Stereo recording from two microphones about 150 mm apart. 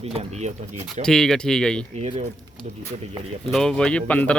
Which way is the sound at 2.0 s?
40° right (ahead or behind).